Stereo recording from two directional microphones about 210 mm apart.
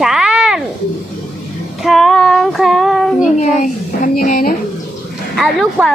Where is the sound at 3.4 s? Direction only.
35° left (ahead or behind).